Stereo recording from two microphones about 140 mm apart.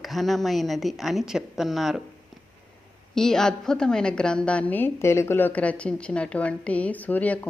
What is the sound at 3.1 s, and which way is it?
A woman's voice, 5° left (ahead or behind).